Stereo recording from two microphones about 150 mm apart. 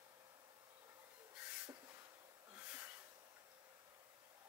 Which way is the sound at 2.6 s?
10° right (ahead or behind).